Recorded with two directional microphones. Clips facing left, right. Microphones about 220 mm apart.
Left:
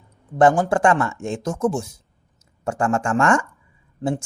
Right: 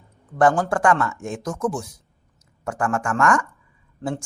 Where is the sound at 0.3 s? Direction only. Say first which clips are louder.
Left 2 dB; 20° left (ahead or behind).